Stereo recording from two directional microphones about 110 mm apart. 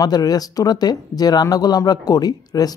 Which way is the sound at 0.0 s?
35° left (ahead or behind).